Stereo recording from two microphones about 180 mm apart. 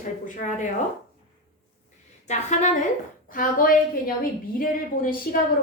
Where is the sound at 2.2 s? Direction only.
40° left (ahead or behind).